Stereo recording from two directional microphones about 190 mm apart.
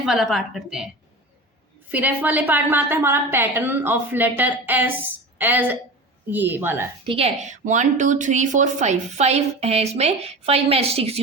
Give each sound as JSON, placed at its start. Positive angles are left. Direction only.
{"t": 0.0, "sound": "a woman's voice", "side_deg": 0}
{"t": 1.9, "sound": "a woman's voice", "side_deg": -10}
{"t": 7.0, "sound": "a woman's voice", "side_deg": -30}